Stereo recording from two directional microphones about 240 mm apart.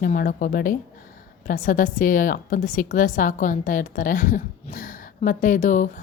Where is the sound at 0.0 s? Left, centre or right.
Left.